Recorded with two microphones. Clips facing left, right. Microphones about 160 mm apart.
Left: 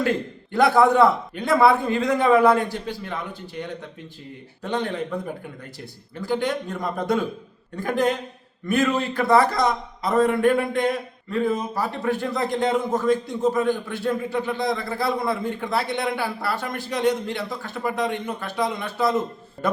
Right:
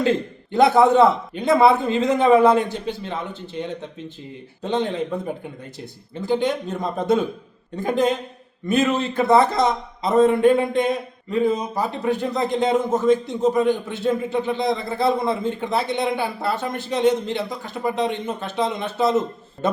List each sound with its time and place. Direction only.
0.0 s a man's voice: 20° right (ahead or behind)